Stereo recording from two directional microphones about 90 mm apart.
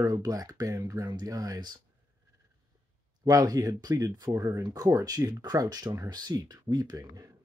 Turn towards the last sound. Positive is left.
turn(degrees=-40)  # may be behind; listen again after turning